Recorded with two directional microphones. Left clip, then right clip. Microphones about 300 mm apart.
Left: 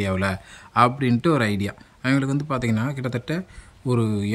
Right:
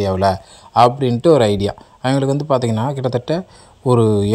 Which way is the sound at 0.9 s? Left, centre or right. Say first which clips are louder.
Right 9 dB; centre.